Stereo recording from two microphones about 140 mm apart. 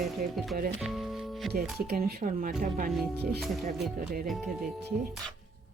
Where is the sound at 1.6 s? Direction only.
90° right.